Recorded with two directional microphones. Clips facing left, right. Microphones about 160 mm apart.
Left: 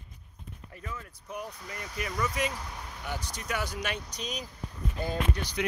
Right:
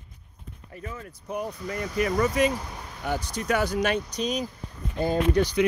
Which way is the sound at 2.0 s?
45° right (ahead or behind).